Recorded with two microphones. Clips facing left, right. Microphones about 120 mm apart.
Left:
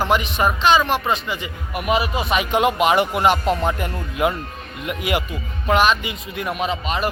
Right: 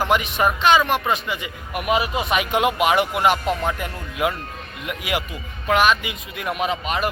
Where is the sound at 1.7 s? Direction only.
15° right (ahead or behind); by 4.3 s centre (ahead or behind).